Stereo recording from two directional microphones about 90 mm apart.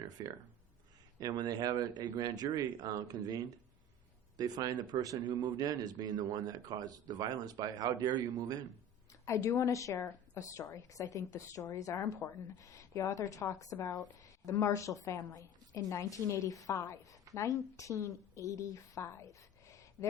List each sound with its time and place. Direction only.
0.2 s a man's voice: 40° right (ahead or behind)
9.2 s a woman's voice: 35° left (ahead or behind)